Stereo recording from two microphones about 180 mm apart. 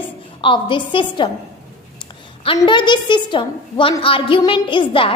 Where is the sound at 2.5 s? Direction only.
25° left (ahead or behind).